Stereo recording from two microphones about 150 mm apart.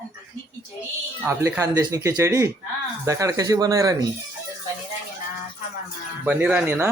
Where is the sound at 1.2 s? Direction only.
20° right (ahead or behind).